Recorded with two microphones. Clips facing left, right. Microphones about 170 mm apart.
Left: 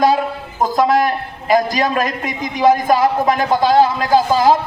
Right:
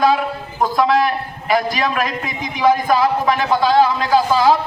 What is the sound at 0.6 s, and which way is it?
A man's voice, 40° left (ahead or behind).